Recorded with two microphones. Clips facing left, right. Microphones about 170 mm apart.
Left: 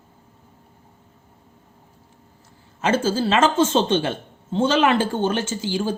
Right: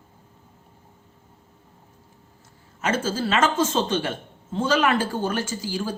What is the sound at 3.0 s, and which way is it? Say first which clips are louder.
Speech: left 3 dB; 30° left (ahead or behind).